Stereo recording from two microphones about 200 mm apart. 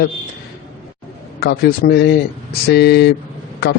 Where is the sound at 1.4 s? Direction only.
55° left (ahead or behind).